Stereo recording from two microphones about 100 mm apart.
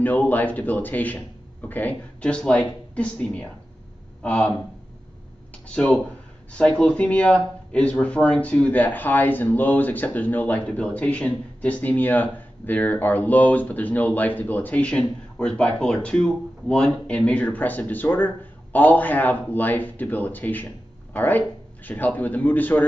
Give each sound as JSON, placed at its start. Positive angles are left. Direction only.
{"t": 0.0, "sound": "speech", "side_deg": 15}
{"t": 5.7, "sound": "speech", "side_deg": 10}